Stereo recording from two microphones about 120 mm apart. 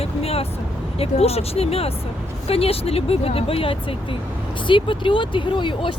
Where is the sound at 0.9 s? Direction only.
55° left (ahead or behind).